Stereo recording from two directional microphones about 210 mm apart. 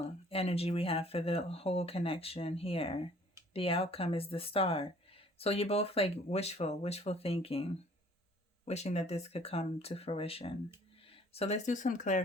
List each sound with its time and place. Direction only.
0.3 s speech: 30° left (ahead or behind)